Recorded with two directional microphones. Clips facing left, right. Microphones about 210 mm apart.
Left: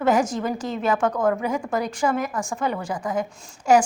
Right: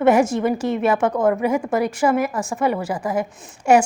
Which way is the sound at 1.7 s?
5° right (ahead or behind).